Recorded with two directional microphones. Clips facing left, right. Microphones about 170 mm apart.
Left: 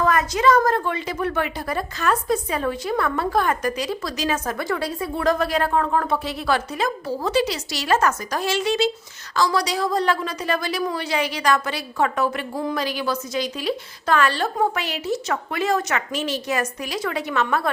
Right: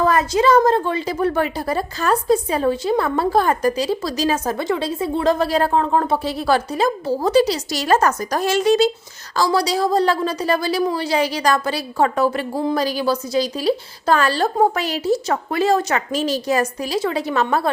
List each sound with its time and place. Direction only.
0.0 s a woman's voice: 30° right (ahead or behind)